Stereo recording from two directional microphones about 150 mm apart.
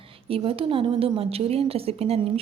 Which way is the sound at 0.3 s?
40° right (ahead or behind).